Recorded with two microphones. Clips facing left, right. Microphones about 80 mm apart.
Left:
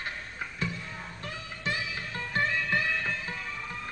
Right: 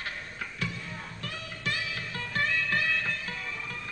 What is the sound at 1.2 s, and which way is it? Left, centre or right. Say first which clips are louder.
Music: left 1 dB; left.